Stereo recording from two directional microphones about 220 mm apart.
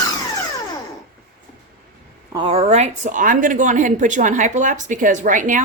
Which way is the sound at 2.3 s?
25° right (ahead or behind).